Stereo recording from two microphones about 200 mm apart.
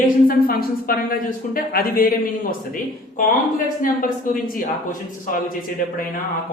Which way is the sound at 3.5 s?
45° left (ahead or behind).